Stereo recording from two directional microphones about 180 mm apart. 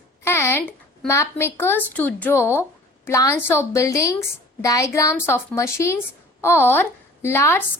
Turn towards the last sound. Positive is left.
turn(degrees=15)  # may be behind; listen again after turning